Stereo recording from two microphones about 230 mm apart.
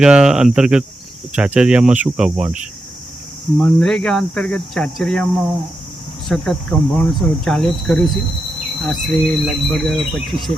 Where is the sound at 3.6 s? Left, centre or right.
Centre.